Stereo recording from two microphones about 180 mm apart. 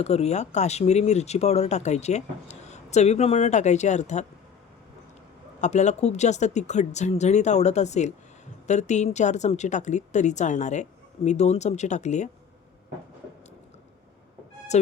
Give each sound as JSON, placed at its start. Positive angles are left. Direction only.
{"t": 0.0, "sound": "speech", "side_deg": 35}
{"t": 5.5, "sound": "speech", "side_deg": 40}